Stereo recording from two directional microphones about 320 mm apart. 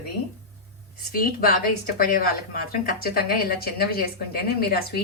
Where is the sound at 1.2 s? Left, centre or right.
Left.